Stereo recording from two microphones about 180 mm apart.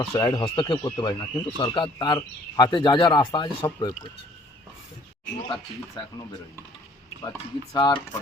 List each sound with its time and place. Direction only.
0.0 s speech: 20° left (ahead or behind)
7.2 s speech: 20° left (ahead or behind)